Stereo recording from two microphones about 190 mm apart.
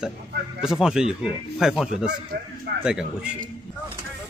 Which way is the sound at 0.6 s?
5° right (ahead or behind).